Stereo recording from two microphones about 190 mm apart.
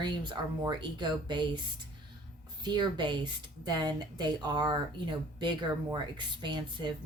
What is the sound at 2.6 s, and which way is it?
Speech, 25° right (ahead or behind).